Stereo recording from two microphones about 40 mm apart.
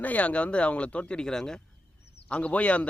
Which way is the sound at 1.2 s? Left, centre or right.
Centre.